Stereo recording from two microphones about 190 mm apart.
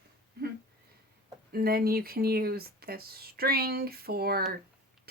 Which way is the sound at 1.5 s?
50° right (ahead or behind).